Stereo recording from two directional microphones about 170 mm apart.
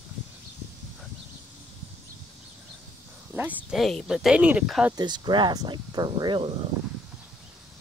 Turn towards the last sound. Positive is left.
turn(degrees=-30)  # may be behind; listen again after turning